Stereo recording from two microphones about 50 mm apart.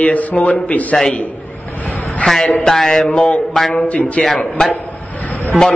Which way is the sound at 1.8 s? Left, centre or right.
Left.